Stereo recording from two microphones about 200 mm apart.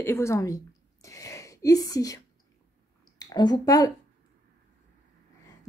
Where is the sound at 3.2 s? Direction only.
20° left (ahead or behind).